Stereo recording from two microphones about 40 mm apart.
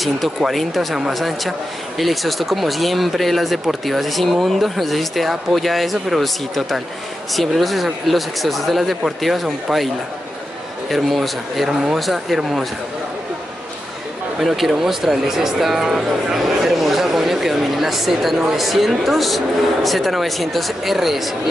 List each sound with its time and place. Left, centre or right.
0.5 s speech: centre
11.1 s speech: centre
14.4 s speech: centre